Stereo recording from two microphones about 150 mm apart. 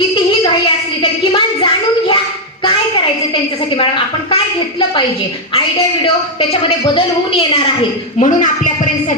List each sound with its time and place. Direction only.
1.2 s a sound: 35° left (ahead or behind)
6.4 s a woman's voice: 35° left (ahead or behind)
8.2 s speech: 55° left (ahead or behind)